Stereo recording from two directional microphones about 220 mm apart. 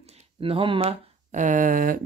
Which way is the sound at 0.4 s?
25° right (ahead or behind).